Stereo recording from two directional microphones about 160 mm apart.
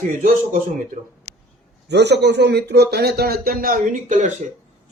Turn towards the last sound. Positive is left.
turn(degrees=-50)  # may be behind; listen again after turning